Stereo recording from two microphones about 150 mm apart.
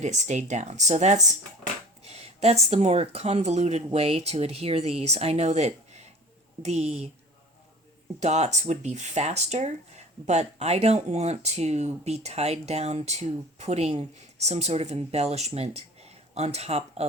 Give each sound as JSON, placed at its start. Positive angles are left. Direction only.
{"t": 0.0, "sound": "speech", "side_deg": -50}
{"t": 8.2, "sound": "speech", "side_deg": -50}